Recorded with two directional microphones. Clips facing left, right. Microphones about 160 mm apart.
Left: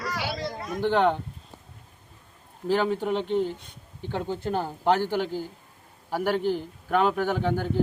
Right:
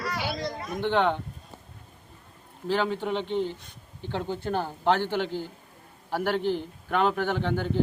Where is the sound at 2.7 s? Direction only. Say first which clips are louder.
Left 2 dB; 10° left (ahead or behind).